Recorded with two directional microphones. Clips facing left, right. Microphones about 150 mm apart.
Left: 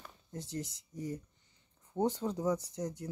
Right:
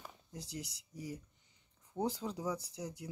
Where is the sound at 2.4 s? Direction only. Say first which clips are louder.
Left 6 dB; 10° right (ahead or behind).